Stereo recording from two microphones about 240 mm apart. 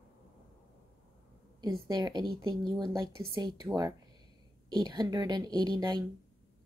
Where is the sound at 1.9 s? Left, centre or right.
Centre.